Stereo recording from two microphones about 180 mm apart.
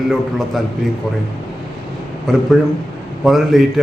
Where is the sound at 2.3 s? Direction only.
Centre (ahead or behind).